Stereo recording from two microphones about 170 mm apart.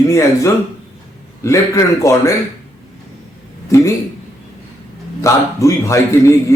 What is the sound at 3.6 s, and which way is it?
Speech, 15° left (ahead or behind).